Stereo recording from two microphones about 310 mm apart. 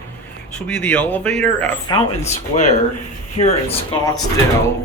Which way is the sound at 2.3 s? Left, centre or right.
Left.